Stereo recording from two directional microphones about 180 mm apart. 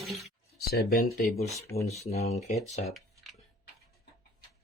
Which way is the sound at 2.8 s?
Centre (ahead or behind).